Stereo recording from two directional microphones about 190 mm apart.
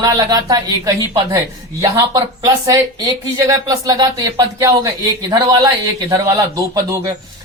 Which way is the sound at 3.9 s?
20° right (ahead or behind).